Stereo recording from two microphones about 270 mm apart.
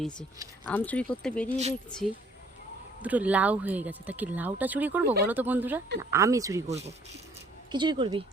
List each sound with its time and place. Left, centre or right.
0.7 s speech: centre
3.0 s speech: centre
6.7 s speech: right